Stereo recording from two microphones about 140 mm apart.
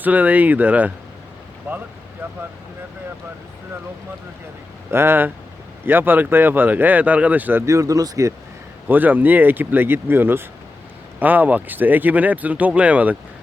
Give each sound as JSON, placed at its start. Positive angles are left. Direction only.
{"t": 0.0, "sound": "speech", "side_deg": -10}
{"t": 4.9, "sound": "speech", "side_deg": -15}
{"t": 8.9, "sound": "speech", "side_deg": -15}